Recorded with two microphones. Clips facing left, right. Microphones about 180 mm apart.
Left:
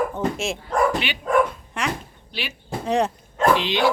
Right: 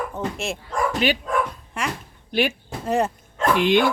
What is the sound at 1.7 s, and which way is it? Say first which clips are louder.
Speech: left 1 dB; centre (ahead or behind).